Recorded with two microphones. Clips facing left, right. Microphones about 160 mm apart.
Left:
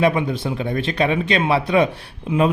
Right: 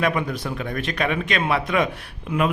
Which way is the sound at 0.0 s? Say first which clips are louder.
Left 5 dB; 25° left (ahead or behind).